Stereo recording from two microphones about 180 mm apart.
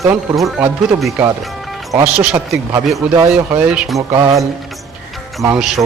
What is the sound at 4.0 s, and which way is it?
Speech, 15° right (ahead or behind).